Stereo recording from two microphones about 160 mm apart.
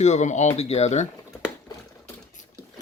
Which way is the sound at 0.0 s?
45° left (ahead or behind).